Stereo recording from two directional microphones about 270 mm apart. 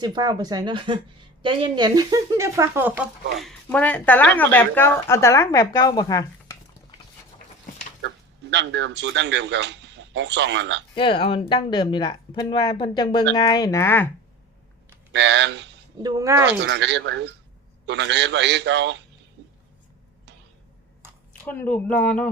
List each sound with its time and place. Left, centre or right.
0.0 s speech: centre
3.3 s a woman's voice: centre
8.0 s speech: right
10.9 s a woman's voice: centre
15.1 s a man's voice: right
16.0 s speech: centre
16.5 s a man's voice: right
21.4 s speech: centre